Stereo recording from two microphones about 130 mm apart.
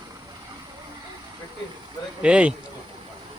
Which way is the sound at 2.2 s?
10° right (ahead or behind).